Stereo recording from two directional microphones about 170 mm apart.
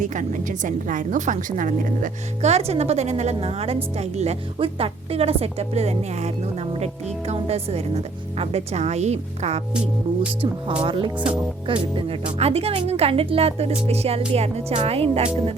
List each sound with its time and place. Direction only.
0.0 s a woman's voice: 45° right (ahead or behind)
9.7 s speech: 5° right (ahead or behind)
10.4 s a woman's voice: 30° right (ahead or behind)